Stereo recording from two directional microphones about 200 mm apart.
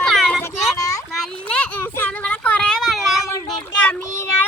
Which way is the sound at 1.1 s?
Centre (ahead or behind).